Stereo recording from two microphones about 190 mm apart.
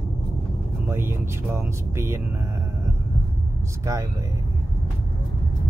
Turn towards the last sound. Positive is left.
turn(degrees=-15)  # may be behind; listen again after turning